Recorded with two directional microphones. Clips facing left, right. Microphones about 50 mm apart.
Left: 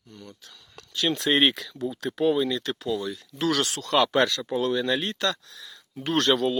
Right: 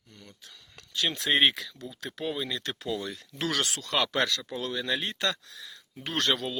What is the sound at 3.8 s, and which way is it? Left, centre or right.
Speech, centre.